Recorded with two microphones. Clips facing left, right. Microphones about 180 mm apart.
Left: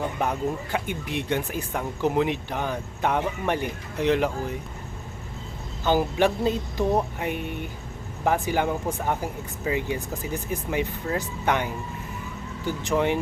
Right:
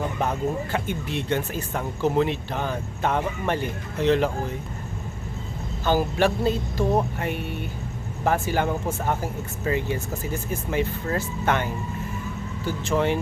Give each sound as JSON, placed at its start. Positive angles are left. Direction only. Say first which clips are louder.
{"t": 0.2, "sound": "speech", "louder": "right 2 dB", "side_deg": 15}
{"t": 5.8, "sound": "speech", "louder": "even", "side_deg": 15}